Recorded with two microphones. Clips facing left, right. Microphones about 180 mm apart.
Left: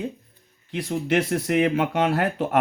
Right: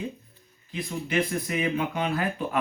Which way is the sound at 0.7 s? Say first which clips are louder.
Left 6 dB; 75° left (ahead or behind).